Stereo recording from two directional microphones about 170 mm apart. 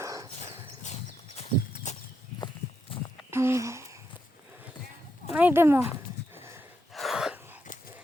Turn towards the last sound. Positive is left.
turn(degrees=-5)  # may be behind; listen again after turning